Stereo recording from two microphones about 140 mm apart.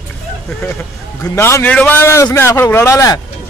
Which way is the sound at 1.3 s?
20° left (ahead or behind).